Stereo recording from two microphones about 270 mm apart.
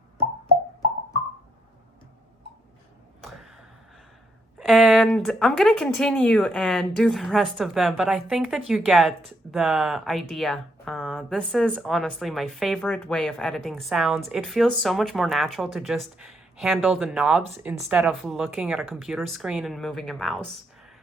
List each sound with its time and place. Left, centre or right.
4.6 s speech: centre